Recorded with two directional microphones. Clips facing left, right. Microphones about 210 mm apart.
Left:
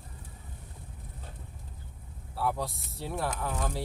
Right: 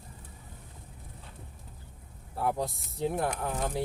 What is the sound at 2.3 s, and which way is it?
Speech, 20° right (ahead or behind).